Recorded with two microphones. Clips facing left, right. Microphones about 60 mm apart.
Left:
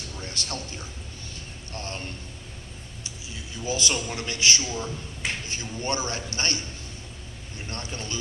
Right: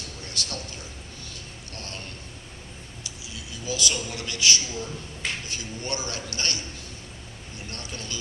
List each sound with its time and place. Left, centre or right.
0.2 s a man's voice: left
3.0 s a man's voice: left
7.7 s a man's voice: left